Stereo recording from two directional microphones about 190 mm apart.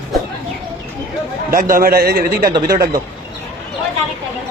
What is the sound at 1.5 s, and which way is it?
A man's voice, 45° right (ahead or behind).